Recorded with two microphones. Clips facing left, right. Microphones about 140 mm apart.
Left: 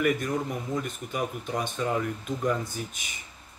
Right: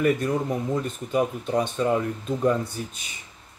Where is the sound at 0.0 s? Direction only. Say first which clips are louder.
Right 4 dB; 30° right (ahead or behind).